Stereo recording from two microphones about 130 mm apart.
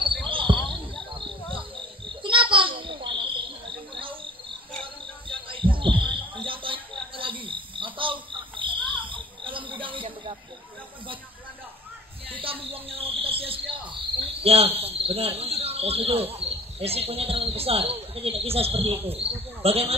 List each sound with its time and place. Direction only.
0.3 s basketball bounce: 40° right (ahead or behind)
2.0 s a sound: 40° right (ahead or behind)
5.3 s heart sounds: 40° right (ahead or behind)
6.1 s frog: 40° right (ahead or behind)
9.4 s a sound: 40° right (ahead or behind)
12.4 s cricket: 45° right (ahead or behind)
14.8 s speech: 50° right (ahead or behind)